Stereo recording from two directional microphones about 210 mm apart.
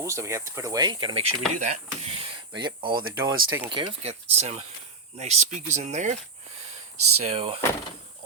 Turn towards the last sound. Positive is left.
turn(degrees=-25)  # may be behind; listen again after turning